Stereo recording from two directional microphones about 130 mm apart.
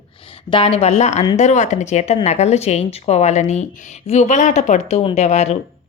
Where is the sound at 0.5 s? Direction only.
45° left (ahead or behind).